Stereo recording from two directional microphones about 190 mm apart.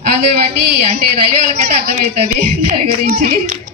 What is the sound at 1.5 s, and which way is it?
A woman's voice, 45° right (ahead or behind).